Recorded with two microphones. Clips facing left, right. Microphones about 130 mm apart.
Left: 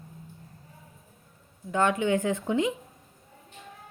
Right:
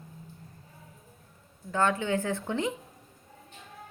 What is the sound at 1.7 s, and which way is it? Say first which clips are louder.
A woman's voice: left 3 dB; 15° left (ahead or behind).